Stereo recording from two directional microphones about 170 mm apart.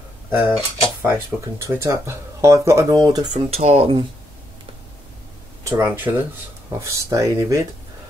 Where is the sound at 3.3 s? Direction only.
40° right (ahead or behind).